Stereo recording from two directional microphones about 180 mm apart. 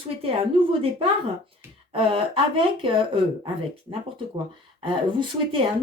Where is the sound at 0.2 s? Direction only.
30° right (ahead or behind).